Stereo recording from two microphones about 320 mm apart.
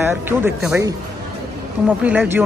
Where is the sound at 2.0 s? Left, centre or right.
Centre.